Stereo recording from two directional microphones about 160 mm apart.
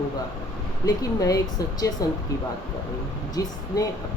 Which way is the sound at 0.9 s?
20° left (ahead or behind).